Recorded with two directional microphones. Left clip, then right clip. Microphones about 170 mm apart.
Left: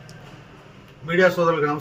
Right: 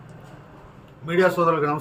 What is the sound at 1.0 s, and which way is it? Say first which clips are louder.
Speech: left 1 dB; 25° right (ahead or behind).